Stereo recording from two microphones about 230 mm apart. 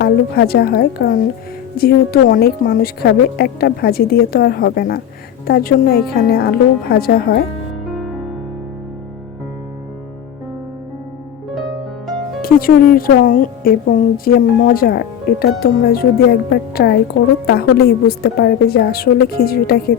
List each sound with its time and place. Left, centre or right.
0.0 s speech: left
7.9 s music: centre
12.4 s a woman's voice: left